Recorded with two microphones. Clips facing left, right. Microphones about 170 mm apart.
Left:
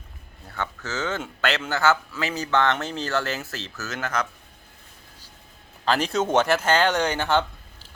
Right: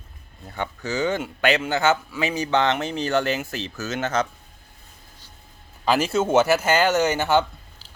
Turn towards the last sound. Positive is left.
turn(degrees=-10)  # may be behind; listen again after turning